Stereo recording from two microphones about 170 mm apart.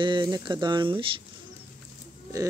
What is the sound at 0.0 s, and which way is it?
Speech, 25° right (ahead or behind).